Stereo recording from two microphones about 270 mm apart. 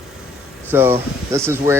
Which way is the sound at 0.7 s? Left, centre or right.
Centre.